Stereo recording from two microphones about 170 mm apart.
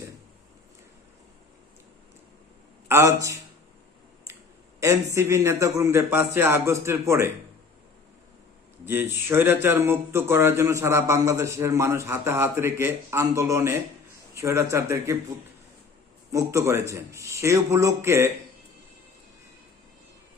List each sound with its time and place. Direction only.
2.9 s speech: 20° right (ahead or behind)
4.8 s speech: 15° right (ahead or behind)
8.8 s speech: 10° right (ahead or behind)
16.3 s speech: 15° right (ahead or behind)